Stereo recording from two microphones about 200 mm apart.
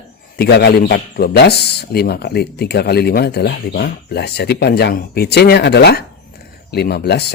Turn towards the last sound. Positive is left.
turn(degrees=55)  # may be behind; listen again after turning